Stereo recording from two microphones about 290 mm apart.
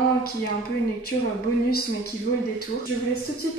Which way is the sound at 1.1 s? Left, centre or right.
Left.